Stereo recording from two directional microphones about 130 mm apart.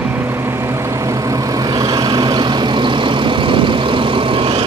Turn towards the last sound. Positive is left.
turn(degrees=-45)  # may be behind; listen again after turning